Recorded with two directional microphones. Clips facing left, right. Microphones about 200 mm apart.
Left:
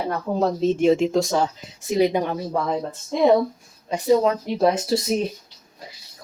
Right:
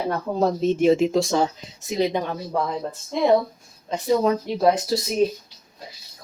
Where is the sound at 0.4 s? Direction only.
5° right (ahead or behind).